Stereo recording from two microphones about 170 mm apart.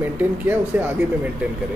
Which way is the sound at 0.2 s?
10° right (ahead or behind).